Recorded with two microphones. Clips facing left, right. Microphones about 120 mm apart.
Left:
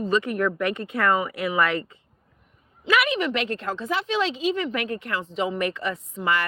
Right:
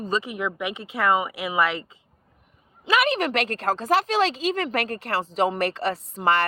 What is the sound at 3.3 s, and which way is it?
Speech, 90° right.